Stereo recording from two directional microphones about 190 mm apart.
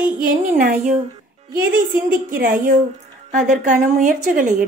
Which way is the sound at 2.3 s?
45° right (ahead or behind).